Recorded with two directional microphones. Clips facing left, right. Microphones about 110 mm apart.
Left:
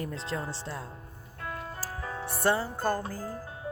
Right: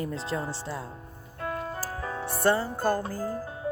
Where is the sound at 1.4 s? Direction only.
45° right (ahead or behind).